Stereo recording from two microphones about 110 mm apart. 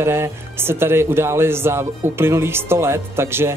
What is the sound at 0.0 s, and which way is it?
Speech, 25° right (ahead or behind).